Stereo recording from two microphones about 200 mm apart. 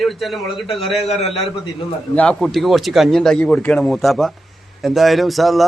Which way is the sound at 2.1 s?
5° left (ahead or behind).